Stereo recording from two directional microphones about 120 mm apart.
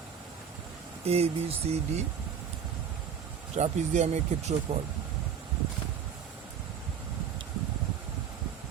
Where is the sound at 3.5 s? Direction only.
70° right (ahead or behind).